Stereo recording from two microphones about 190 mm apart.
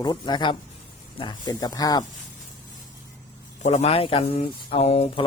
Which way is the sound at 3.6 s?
35° left (ahead or behind).